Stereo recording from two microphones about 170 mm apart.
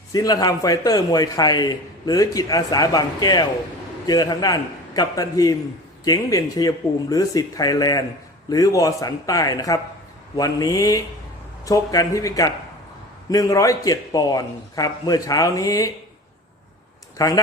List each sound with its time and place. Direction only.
0.1 s a man's voice: 20° left (ahead or behind)
17.2 s a man's voice: 20° left (ahead or behind)